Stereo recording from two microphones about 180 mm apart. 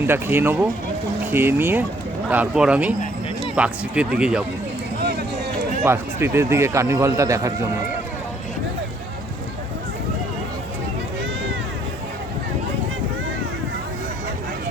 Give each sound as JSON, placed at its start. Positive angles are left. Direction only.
{"t": 0.0, "sound": "a man's voice", "side_deg": -10}
{"t": 5.8, "sound": "a man's voice", "side_deg": -15}